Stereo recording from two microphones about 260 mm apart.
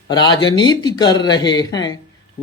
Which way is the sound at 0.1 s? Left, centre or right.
Centre.